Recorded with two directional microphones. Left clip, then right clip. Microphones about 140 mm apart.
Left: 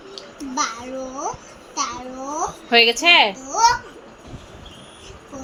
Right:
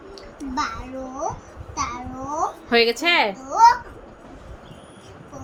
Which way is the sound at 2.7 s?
25° right (ahead or behind).